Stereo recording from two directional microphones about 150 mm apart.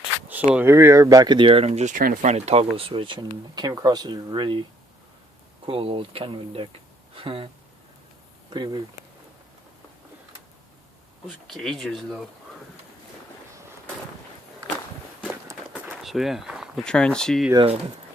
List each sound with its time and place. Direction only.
0.5 s speech: 15° right (ahead or behind); by 2.3 s 65° right (ahead or behind)
2.3 s speech: 45° right (ahead or behind)
5.6 s speech: 40° right (ahead or behind)
8.4 s speech: 30° right (ahead or behind)
11.3 s speech: centre (ahead or behind)
15.7 s speech: 5° right (ahead or behind)